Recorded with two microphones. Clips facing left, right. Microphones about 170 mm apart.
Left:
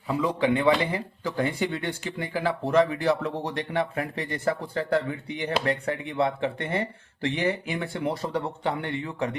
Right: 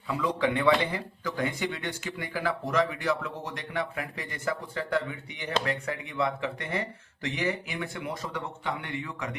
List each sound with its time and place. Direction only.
0.1 s a man's voice: 25° left (ahead or behind)